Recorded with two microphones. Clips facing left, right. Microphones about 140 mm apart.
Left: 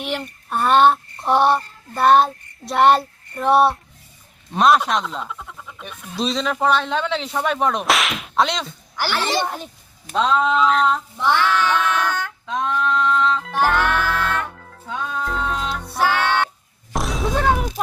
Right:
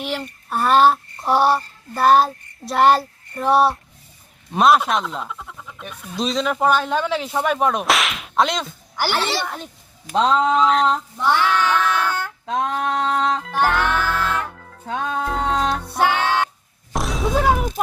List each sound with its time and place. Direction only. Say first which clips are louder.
0.0 s a sound: even; centre (ahead or behind)
4.5 s speech: even; 5° right (ahead or behind)
9.2 s speech: left 2 dB; 15° left (ahead or behind)
10.1 s a sound: right 1 dB; 25° right (ahead or behind)
10.6 s speech: right 1 dB; centre (ahead or behind)
11.9 s child singing: even; 10° right (ahead or behind)
12.6 s a sound: left 4 dB; 40° right (ahead or behind)
13.1 s music: left 1 dB; 40° right (ahead or behind)
13.4 s music: even; centre (ahead or behind)
14.8 s music: right 3 dB; 70° right (ahead or behind)
16.0 s music: even; 15° right (ahead or behind)
16.9 s a sound: right 1 dB; centre (ahead or behind)